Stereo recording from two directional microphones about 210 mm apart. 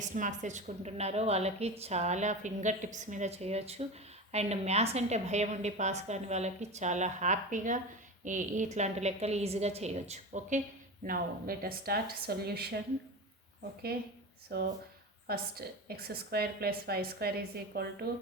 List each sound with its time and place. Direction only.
0.0 s a woman's voice: 35° right (ahead or behind)
13.9 s a woman's voice: 50° right (ahead or behind)